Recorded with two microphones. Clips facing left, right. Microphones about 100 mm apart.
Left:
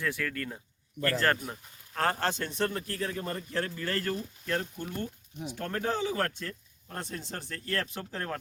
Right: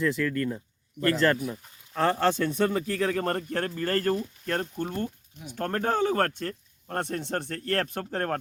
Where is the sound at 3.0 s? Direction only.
85° right.